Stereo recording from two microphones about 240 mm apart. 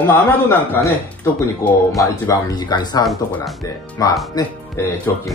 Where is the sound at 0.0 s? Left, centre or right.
Centre.